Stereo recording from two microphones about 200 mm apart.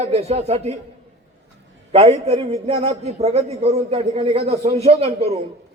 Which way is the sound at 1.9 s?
30° right (ahead or behind).